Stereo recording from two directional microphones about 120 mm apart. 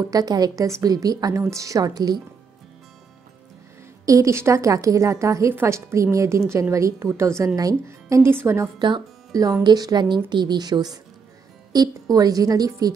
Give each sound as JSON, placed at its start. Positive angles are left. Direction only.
{"t": 0.1, "sound": "speech", "side_deg": -35}
{"t": 4.0, "sound": "a woman's voice", "side_deg": -25}
{"t": 8.7, "sound": "speech", "side_deg": -40}